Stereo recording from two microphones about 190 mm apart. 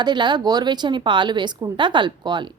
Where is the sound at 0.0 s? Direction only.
25° right (ahead or behind).